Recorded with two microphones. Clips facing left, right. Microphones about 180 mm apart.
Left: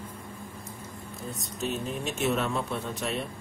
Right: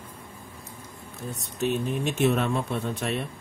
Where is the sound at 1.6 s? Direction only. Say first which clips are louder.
Right 6 dB; 55° right (ahead or behind).